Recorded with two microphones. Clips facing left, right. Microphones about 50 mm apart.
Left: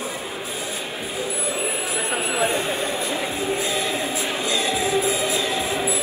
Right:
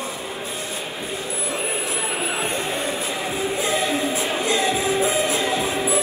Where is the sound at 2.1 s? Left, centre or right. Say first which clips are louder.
Left 5 dB; left.